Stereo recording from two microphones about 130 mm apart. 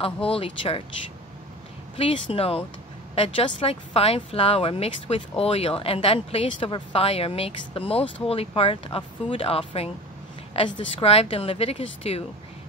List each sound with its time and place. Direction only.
0.0 s speech: 45° left (ahead or behind)
2.0 s speech: 45° left (ahead or behind)